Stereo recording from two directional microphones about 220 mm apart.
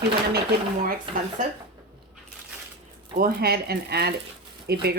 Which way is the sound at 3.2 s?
40° right (ahead or behind).